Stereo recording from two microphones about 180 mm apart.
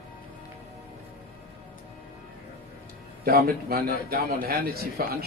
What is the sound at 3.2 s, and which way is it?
A man's voice, 55° right (ahead or behind).